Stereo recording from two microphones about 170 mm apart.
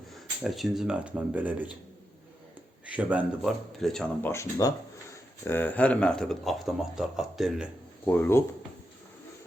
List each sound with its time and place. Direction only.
0.4 s a man's voice: centre (ahead or behind)
2.9 s speech: 10° right (ahead or behind)
3.8 s a man's voice: 5° left (ahead or behind)
4.3 s a man's voice: 15° left (ahead or behind); by 7.7 s centre (ahead or behind)
8.0 s speech: 10° left (ahead or behind)